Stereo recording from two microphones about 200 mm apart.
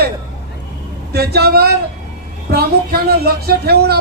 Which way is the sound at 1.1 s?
55° right (ahead or behind).